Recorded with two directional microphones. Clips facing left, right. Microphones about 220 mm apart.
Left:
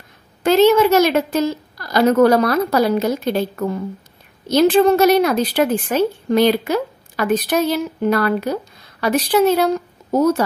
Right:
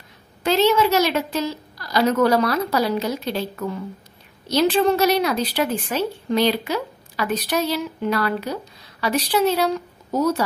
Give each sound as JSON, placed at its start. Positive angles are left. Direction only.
{"t": 0.4, "sound": "a woman's voice", "side_deg": 50}